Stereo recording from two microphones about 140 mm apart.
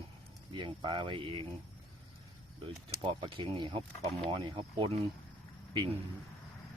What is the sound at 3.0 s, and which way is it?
Speech, 40° right (ahead or behind).